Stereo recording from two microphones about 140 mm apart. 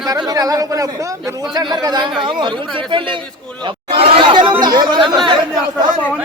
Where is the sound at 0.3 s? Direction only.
25° right (ahead or behind).